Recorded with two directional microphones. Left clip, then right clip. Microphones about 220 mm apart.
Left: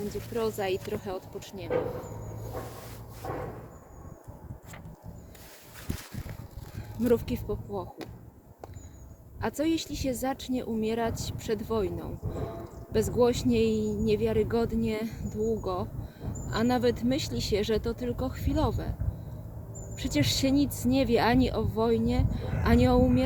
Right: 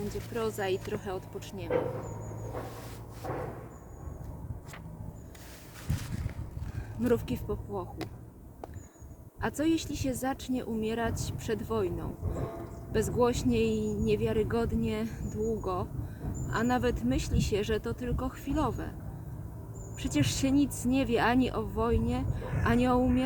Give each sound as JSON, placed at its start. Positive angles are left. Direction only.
{"t": 0.3, "sound": "speech", "side_deg": 5}
{"t": 3.2, "sound": "a sound", "side_deg": 40}
{"t": 5.9, "sound": "boat", "side_deg": 30}
{"t": 7.0, "sound": "speech", "side_deg": 5}
{"t": 9.4, "sound": "speech", "side_deg": 5}
{"t": 20.0, "sound": "speech", "side_deg": 10}